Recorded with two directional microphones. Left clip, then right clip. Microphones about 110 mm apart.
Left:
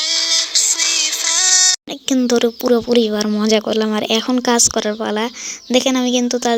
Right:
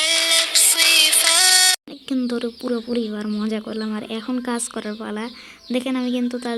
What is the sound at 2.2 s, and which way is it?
Speech, 35° left (ahead or behind).